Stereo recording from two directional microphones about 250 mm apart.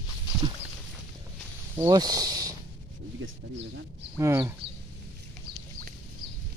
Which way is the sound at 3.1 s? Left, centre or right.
Right.